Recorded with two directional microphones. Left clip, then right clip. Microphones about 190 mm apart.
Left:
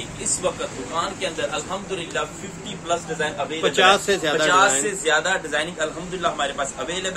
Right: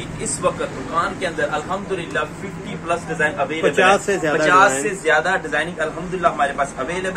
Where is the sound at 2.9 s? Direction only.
5° left (ahead or behind).